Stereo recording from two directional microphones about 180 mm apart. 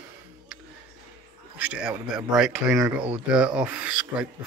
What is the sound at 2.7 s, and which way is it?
Speech, 15° right (ahead or behind).